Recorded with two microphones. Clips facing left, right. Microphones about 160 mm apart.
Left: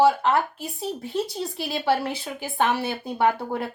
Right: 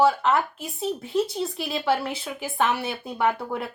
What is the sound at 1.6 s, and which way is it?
Speech, 30° left (ahead or behind).